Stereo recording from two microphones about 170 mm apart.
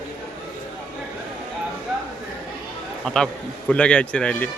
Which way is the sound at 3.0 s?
5° left (ahead or behind).